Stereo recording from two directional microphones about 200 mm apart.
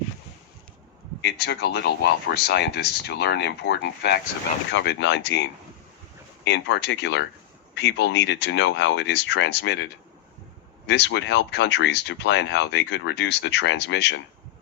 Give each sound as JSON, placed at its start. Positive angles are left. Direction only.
{"t": 1.2, "sound": "speech", "side_deg": 55}